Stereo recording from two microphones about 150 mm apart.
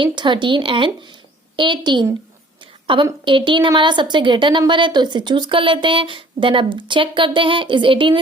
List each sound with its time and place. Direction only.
0.0 s a woman's voice: 30° right (ahead or behind)